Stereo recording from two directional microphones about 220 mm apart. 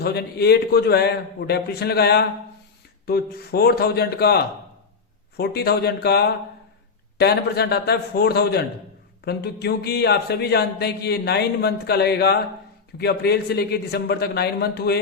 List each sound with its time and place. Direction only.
0.0 s speech: 45° left (ahead or behind)
5.4 s speech: 50° left (ahead or behind)